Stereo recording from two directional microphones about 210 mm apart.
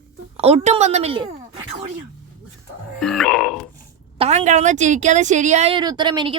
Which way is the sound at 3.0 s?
Centre (ahead or behind).